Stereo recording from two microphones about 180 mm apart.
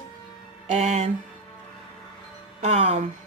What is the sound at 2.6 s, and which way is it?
Speech, 35° right (ahead or behind).